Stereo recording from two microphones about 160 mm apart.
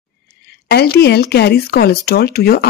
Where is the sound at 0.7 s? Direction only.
85° left.